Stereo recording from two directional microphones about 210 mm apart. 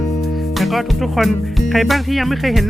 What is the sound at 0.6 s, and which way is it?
Speech, centre (ahead or behind).